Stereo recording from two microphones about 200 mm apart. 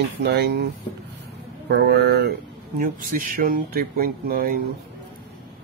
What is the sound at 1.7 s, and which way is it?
Speech, 55° right (ahead or behind).